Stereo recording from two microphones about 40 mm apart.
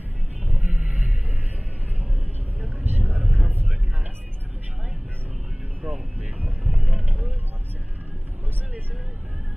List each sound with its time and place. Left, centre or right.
0.5 s a sound: right
2.8 s vehicle: right
3.2 s vehicle: right
5.8 s vehicle: right